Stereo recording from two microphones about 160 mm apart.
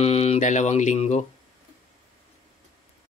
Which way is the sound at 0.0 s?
40° left (ahead or behind).